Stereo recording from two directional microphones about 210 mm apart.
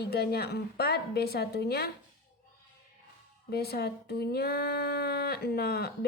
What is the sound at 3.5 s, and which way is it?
Speech, 50° left (ahead or behind).